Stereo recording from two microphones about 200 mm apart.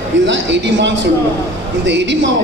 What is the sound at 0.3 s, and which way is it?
A man's voice, 60° right (ahead or behind).